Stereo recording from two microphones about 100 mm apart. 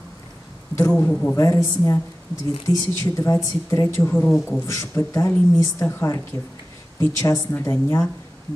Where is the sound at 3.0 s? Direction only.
30° left (ahead or behind).